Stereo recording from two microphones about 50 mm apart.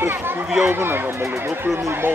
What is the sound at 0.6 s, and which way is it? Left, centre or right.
Speech, right.